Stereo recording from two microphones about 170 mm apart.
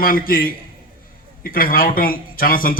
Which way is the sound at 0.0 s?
60° left (ahead or behind).